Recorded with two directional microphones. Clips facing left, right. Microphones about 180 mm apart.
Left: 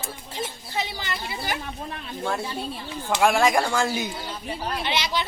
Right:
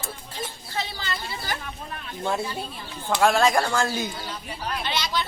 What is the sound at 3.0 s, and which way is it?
Speech, 15° left (ahead or behind).